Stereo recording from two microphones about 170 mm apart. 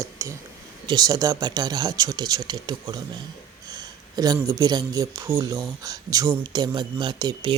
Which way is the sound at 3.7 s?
20° right (ahead or behind).